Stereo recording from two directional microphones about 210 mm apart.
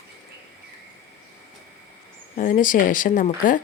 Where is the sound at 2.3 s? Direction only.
40° left (ahead or behind).